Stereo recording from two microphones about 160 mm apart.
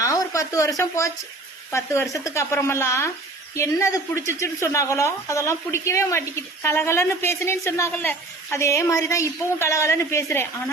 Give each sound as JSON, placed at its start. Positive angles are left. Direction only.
{"t": 0.0, "sound": "speech", "side_deg": 20}